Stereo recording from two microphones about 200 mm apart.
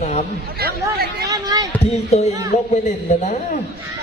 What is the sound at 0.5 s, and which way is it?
Speech, 50° right (ahead or behind).